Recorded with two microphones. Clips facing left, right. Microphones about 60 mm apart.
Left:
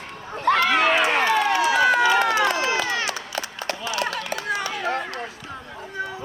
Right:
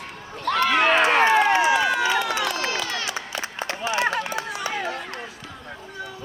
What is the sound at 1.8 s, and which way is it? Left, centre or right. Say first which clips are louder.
Run: left 4 dB; left.